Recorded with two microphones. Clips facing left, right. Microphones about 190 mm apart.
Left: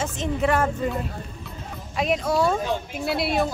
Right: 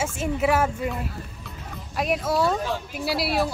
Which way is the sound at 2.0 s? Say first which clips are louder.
Left 1 dB; centre (ahead or behind).